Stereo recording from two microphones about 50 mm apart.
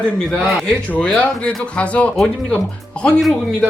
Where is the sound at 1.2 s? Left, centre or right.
Left.